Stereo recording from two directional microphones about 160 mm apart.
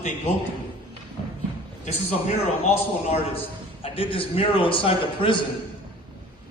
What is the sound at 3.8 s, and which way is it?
A man's voice, 35° left (ahead or behind).